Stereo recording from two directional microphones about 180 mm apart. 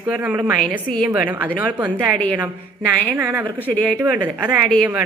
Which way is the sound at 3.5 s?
10° left (ahead or behind).